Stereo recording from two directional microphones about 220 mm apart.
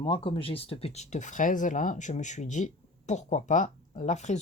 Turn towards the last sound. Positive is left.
turn(degrees=30)  # may be behind; listen again after turning